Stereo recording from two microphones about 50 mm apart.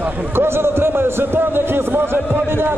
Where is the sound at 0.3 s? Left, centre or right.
Right.